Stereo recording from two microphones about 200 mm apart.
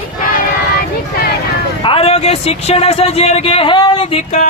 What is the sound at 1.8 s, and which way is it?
Speech, 30° left (ahead or behind).